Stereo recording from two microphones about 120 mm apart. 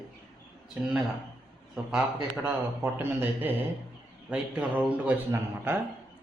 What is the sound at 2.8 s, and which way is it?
Speech, 15° right (ahead or behind).